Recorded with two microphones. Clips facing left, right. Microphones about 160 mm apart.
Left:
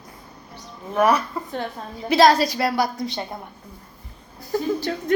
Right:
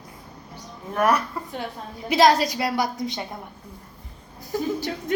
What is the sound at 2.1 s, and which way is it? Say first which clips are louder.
A woman's voice: left 2 dB; 15° right (ahead or behind).